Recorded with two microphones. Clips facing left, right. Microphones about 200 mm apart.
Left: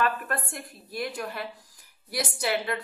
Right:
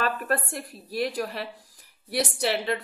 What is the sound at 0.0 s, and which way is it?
A woman's voice, 35° right (ahead or behind).